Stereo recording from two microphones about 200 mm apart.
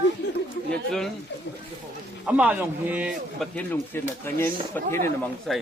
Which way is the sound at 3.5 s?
10° left (ahead or behind).